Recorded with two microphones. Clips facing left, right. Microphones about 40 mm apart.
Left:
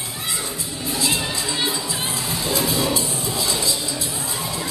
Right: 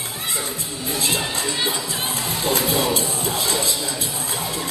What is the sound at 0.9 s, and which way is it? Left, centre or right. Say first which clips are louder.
Music: even; right.